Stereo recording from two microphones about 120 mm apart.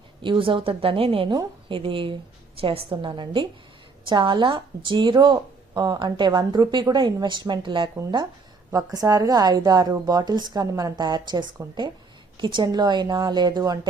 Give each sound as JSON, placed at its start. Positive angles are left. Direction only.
{"t": 0.2, "sound": "a woman's voice", "side_deg": -45}
{"t": 8.7, "sound": "speech", "side_deg": -30}